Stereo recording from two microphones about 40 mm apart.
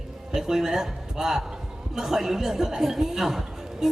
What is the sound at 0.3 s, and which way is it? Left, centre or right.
Speech, centre.